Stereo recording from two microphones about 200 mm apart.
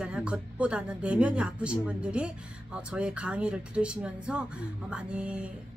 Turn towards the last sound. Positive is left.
turn(degrees=-5)  # may be behind; listen again after turning